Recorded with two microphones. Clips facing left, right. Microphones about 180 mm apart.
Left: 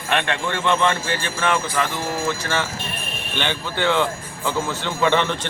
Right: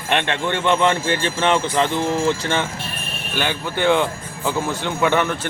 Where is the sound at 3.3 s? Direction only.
10° right (ahead or behind).